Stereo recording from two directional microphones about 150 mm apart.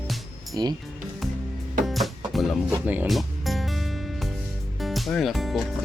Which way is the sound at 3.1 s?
Centre (ahead or behind).